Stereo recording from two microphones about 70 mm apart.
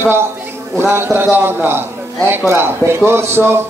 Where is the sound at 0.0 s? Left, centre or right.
Right.